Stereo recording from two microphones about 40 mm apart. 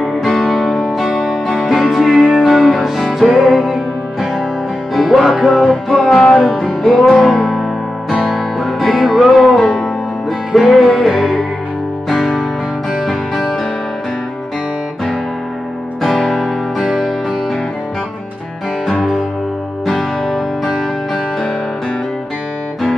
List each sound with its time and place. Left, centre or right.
0.2 s music: centre
1.1 s music: centre
4.9 s music: centre
16.1 s music: centre
16.3 s music: centre
19.9 s music: centre